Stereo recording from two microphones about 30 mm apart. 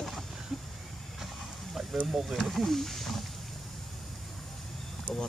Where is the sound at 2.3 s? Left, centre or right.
Centre.